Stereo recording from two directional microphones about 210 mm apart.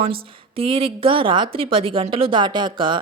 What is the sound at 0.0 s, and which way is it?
A woman's voice, 25° right (ahead or behind).